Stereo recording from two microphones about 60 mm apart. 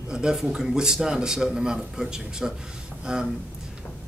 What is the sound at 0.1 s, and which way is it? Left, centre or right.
A man's voice, centre.